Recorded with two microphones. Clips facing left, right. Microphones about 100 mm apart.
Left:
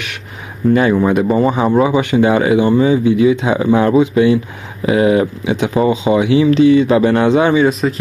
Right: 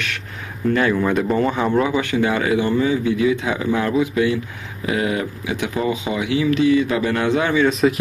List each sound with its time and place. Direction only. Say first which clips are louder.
0.7 s speech: left 6 dB; 20° left (ahead or behind)
7.8 s speech: even; 5° left (ahead or behind)